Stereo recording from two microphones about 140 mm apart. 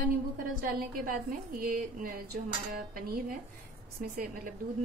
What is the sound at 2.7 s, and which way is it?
A woman's voice, 90° right.